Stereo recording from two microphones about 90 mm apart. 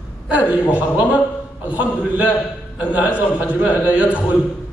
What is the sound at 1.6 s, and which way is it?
Speech, 15° right (ahead or behind).